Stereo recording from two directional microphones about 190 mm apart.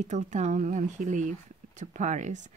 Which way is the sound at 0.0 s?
35° right (ahead or behind).